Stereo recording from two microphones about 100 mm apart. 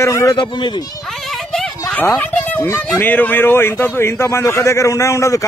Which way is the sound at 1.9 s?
15° left (ahead or behind).